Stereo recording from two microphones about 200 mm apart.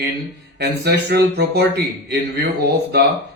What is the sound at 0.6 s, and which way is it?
Speech, 55° right (ahead or behind).